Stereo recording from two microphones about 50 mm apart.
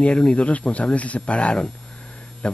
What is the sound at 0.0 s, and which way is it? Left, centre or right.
Speech, left.